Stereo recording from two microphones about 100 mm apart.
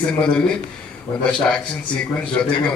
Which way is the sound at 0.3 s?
5° left (ahead or behind).